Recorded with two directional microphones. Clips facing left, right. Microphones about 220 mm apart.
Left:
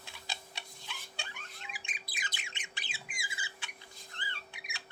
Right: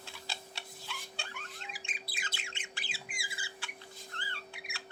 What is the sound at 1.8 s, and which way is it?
Bird, 15° left (ahead or behind).